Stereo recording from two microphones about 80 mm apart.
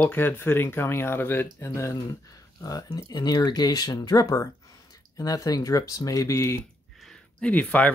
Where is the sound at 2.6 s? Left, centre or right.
Left.